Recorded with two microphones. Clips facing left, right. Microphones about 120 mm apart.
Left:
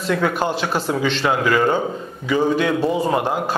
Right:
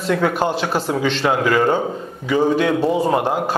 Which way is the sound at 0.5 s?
55° right (ahead or behind).